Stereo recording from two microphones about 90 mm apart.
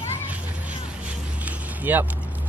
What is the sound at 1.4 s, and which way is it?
Vehicle, 20° right (ahead or behind).